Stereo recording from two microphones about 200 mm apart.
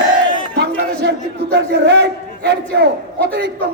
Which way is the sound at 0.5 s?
55° right (ahead or behind).